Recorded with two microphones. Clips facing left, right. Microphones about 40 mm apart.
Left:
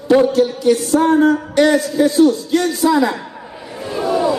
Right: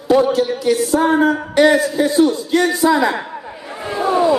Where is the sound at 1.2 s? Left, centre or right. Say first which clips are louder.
Even; centre.